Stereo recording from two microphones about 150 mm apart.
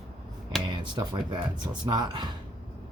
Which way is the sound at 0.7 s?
30° right (ahead or behind).